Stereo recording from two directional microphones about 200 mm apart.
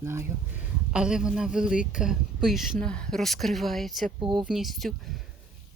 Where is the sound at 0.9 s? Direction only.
5° right (ahead or behind).